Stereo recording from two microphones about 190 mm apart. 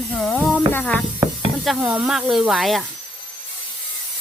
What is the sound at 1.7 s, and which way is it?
Speech, 5° right (ahead or behind).